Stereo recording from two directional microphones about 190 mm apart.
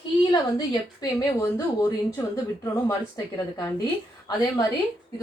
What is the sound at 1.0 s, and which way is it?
A woman's voice, 20° left (ahead or behind).